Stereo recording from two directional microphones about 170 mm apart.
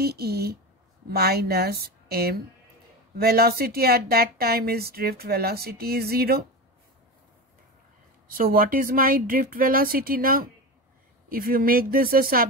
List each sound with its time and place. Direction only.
0.0 s speech: 70° right (ahead or behind)
8.3 s speech: 55° right (ahead or behind)